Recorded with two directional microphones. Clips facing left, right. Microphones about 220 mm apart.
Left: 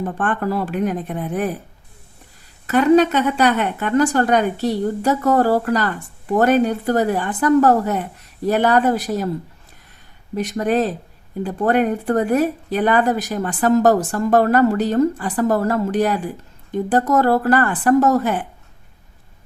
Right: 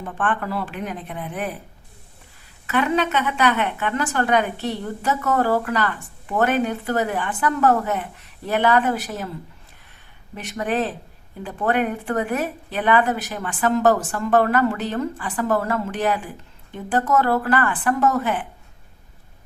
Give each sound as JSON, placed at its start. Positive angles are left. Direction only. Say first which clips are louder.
{"t": 0.0, "sound": "a woman's voice", "louder": "left 4 dB", "side_deg": 40}
{"t": 2.6, "sound": "a woman's voice", "louder": "left 8 dB", "side_deg": 40}
{"t": 10.3, "sound": "a woman's voice", "louder": "left 6 dB", "side_deg": 40}